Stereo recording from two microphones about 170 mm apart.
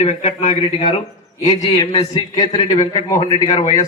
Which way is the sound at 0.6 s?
30° left (ahead or behind).